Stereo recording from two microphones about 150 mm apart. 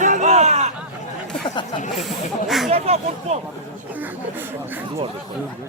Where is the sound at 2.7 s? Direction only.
45° right (ahead or behind).